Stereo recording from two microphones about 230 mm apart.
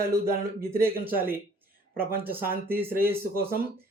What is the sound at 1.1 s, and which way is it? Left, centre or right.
Speech, centre.